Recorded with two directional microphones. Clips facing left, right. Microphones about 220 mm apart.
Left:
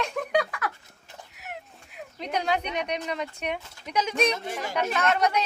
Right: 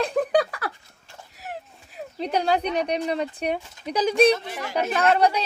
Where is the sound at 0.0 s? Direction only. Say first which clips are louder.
Right 5 dB; 35° right (ahead or behind).